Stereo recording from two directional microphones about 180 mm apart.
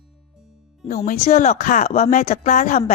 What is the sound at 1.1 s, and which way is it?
A woman's voice, 40° left (ahead or behind).